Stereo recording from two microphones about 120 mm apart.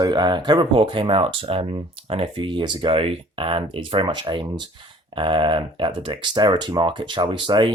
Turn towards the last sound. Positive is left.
turn(degrees=-40)  # may be behind; listen again after turning